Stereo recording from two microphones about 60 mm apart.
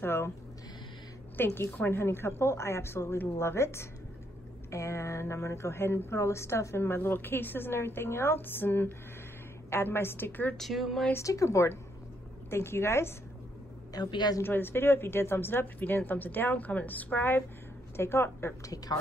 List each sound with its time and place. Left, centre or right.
0.0 s a sound: left
1.3 s a woman's voice: left
10.6 s speech: centre
11.1 s a woman's voice: left
12.4 s speech: left
14.4 s a woman's voice: left